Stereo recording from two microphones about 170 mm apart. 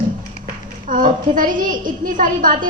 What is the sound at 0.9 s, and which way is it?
Speech, 55° right (ahead or behind).